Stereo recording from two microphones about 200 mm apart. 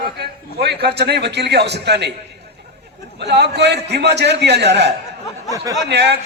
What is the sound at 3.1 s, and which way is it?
A man's voice, 55° right (ahead or behind).